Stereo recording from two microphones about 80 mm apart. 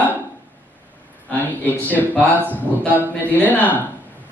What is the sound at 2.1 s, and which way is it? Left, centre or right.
Speech, right.